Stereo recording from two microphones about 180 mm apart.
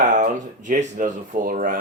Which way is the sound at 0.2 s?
45° right (ahead or behind).